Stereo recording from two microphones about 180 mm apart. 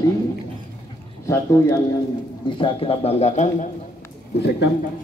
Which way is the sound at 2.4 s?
30° left (ahead or behind).